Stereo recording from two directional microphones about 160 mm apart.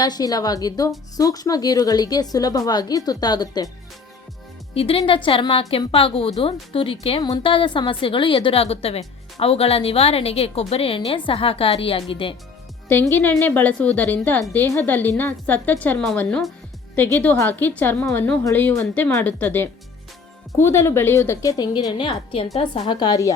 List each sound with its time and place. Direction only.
0.0 s a woman's voice: 25° left (ahead or behind)
4.7 s a woman's voice: 35° left (ahead or behind)
12.9 s a woman's voice: 15° left (ahead or behind)